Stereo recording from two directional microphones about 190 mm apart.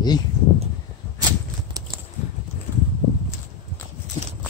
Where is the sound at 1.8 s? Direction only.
20° right (ahead or behind).